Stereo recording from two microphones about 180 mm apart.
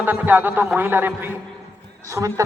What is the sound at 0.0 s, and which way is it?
A man's voice, 10° right (ahead or behind).